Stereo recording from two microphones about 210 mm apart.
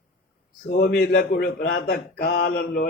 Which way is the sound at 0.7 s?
50° left (ahead or behind).